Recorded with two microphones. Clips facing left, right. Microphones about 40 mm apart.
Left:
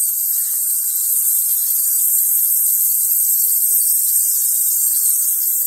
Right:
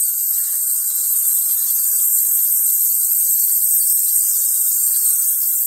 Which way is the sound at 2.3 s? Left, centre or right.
Right.